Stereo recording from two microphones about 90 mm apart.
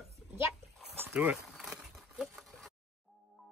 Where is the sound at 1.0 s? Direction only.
20° right (ahead or behind).